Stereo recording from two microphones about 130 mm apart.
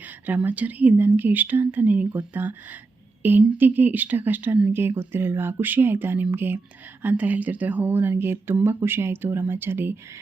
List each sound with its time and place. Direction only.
0.0 s a woman's voice: 10° right (ahead or behind)